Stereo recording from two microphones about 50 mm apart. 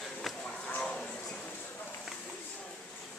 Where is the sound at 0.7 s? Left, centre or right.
Centre.